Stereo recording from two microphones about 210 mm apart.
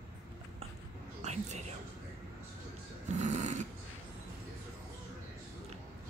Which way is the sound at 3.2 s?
35° right (ahead or behind).